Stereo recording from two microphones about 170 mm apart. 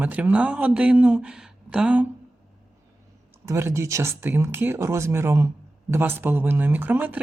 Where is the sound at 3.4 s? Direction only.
15° right (ahead or behind).